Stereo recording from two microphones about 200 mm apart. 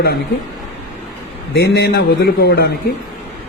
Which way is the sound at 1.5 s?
55° left (ahead or behind).